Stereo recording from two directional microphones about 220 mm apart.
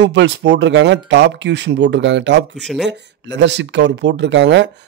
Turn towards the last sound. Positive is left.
turn(degrees=-55)  # may be behind; listen again after turning